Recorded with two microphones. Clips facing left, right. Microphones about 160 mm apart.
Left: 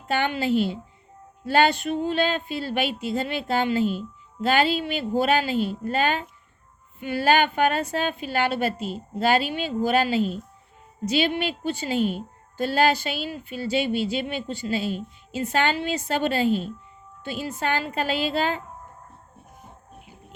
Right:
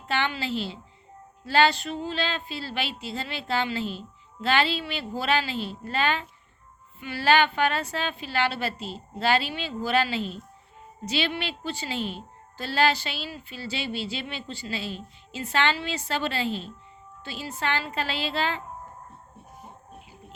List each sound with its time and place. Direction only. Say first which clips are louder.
0.1 s a woman's voice: left 5 dB; 45° left (ahead or behind)